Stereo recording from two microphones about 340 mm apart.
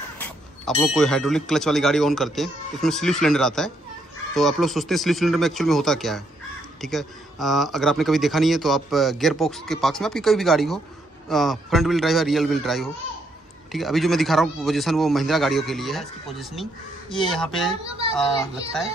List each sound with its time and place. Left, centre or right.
0.2 s speech: centre
17.8 s a child's voice: centre